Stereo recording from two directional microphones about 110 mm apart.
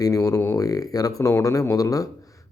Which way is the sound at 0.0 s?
30° left (ahead or behind).